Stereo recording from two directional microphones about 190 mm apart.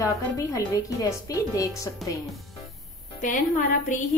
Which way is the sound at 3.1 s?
45° left (ahead or behind).